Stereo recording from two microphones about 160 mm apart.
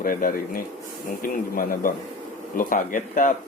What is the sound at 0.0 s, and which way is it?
Speech, 60° left (ahead or behind).